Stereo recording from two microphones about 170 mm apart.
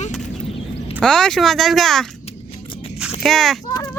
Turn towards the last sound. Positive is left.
turn(degrees=0)  # may be behind; listen again after turning